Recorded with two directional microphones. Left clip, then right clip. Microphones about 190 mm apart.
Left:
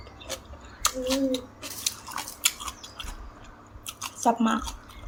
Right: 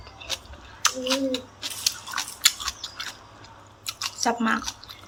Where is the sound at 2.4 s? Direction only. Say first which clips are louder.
Right 6 dB; 20° left (ahead or behind).